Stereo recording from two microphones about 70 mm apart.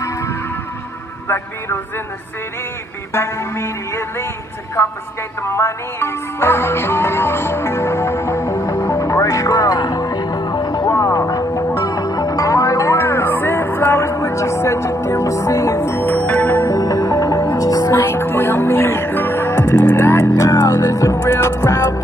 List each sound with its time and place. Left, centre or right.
5.5 s music: left
10.9 s music: left
15.9 s music: left
16.2 s music: centre
16.6 s music: left
17.9 s music: left